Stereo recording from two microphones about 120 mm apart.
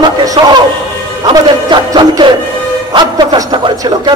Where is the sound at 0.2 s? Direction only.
30° right (ahead or behind).